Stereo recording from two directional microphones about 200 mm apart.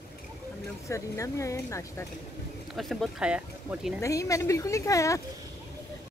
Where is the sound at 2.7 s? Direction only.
Centre (ahead or behind).